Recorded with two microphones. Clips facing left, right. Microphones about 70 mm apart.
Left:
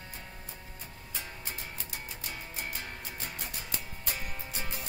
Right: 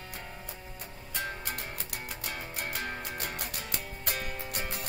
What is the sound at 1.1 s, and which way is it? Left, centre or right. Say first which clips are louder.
Music: right 7 dB; right.